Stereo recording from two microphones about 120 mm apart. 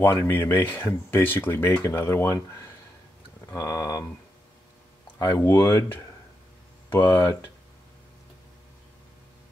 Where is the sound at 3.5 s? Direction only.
30° left (ahead or behind).